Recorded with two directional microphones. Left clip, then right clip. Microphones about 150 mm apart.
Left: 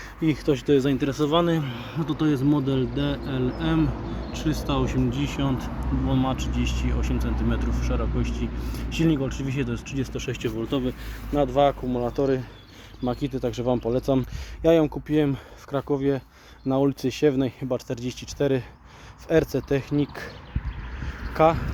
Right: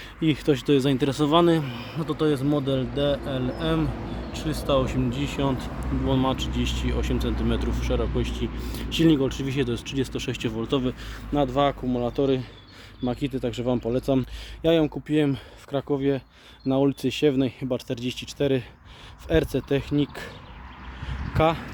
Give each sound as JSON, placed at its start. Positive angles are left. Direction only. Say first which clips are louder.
{"t": 0.2, "sound": "a man's voice", "louder": "right 1 dB", "side_deg": -35}
{"t": 11.3, "sound": "a man's voice", "louder": "left 2 dB", "side_deg": -25}
{"t": 13.1, "sound": "speech", "louder": "left 1 dB", "side_deg": -10}
{"t": 21.0, "sound": "vehicle", "louder": "left 3 dB", "side_deg": -20}